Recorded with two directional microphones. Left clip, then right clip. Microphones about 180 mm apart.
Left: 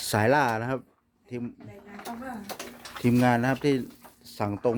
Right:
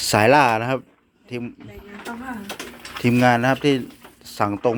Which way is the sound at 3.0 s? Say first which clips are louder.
Right 7 dB; 10° left (ahead or behind).